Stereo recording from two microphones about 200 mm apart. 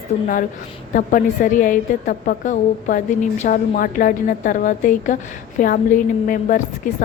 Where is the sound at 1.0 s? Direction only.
40° left (ahead or behind).